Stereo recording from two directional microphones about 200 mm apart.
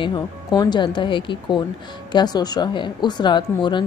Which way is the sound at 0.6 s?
20° left (ahead or behind).